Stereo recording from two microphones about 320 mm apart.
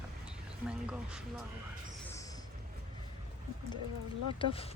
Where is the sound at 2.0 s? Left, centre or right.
Centre.